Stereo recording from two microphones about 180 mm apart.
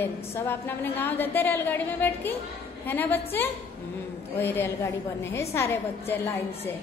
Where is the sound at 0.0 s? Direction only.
10° left (ahead or behind).